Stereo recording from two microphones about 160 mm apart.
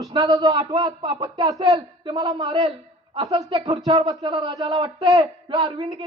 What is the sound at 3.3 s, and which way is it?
A man's voice, 35° right (ahead or behind).